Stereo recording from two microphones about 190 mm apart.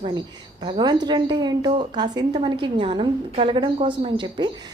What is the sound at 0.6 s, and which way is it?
Speech, 25° right (ahead or behind).